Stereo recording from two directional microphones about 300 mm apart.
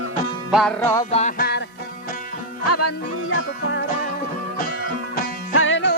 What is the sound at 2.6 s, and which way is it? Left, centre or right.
Music, left.